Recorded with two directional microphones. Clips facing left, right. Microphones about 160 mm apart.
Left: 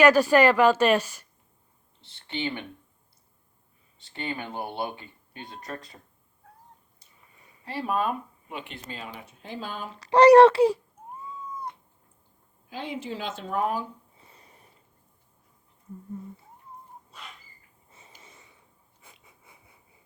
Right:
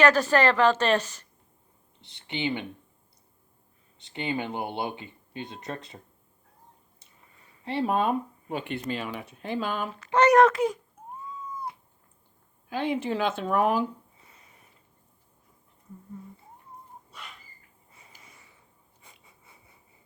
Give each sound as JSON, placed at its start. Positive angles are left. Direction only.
{"t": 0.0, "sound": "speech", "side_deg": 10}
{"t": 2.0, "sound": "speech", "side_deg": -15}
{"t": 3.9, "sound": "speech", "side_deg": -20}
{"t": 7.6, "sound": "speech", "side_deg": -25}
{"t": 8.7, "sound": "speech", "side_deg": -70}
{"t": 9.9, "sound": "a child's voice", "side_deg": 35}
{"t": 12.7, "sound": "speech", "side_deg": -60}
{"t": 14.3, "sound": "a sound", "side_deg": 35}
{"t": 17.9, "sound": "snort", "side_deg": 25}
{"t": 19.0, "sound": "a sound", "side_deg": 10}